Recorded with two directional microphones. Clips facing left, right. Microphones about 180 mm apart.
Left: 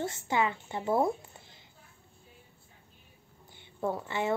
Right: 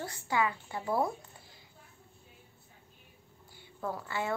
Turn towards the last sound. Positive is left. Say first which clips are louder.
# left 4 dB
turn(degrees=20)  # may be behind; listen again after turning